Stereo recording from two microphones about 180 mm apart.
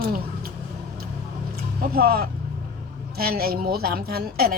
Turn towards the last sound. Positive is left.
turn(degrees=-55)  # may be behind; listen again after turning